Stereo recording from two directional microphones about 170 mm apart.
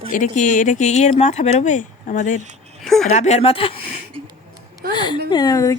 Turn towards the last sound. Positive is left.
turn(degrees=20)  # may be behind; listen again after turning